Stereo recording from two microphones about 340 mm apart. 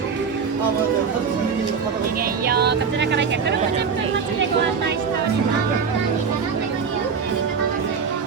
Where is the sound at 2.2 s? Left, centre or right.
Right.